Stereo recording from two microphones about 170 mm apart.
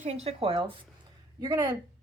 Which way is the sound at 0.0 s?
40° right (ahead or behind).